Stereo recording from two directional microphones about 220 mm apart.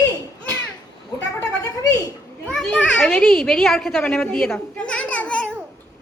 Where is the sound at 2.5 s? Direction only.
5° left (ahead or behind).